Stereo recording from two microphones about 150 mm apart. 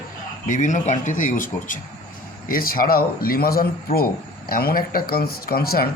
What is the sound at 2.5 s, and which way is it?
A man's voice, 75° left (ahead or behind).